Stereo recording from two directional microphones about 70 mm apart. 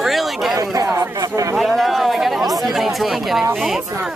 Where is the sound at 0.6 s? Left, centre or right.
Right.